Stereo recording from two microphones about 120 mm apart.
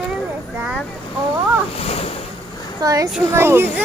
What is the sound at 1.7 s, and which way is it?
Speech, 55° left (ahead or behind).